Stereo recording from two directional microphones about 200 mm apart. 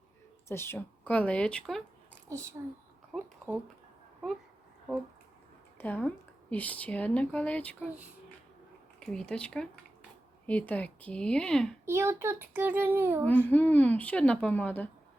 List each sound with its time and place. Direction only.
0.4 s speech: 10° left (ahead or behind)
2.6 s a child's voice: 15° right (ahead or behind)
5.7 s speech: 10° left (ahead or behind)
9.0 s speech: 5° left (ahead or behind)
11.9 s a child's voice: 15° right (ahead or behind)
13.5 s speech: 10° left (ahead or behind)